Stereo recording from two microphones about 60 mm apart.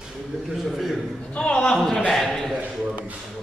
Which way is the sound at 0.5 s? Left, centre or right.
Centre.